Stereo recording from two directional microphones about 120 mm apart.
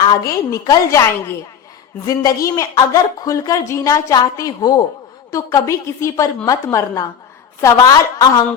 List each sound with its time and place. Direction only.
0.3 s speech: 30° left (ahead or behind)
2.0 s speech: 30° left (ahead or behind)